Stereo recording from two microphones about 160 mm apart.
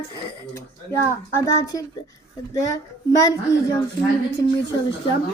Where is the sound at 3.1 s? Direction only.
20° left (ahead or behind).